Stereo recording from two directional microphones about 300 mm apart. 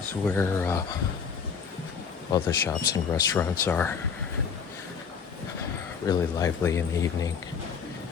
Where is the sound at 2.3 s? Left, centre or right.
Centre.